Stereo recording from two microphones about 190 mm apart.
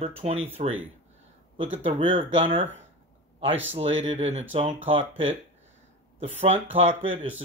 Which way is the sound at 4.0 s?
35° right (ahead or behind).